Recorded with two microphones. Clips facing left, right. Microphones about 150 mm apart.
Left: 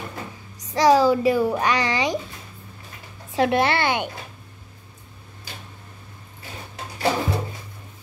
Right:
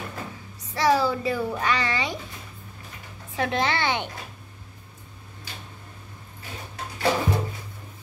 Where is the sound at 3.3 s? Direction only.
15° left (ahead or behind).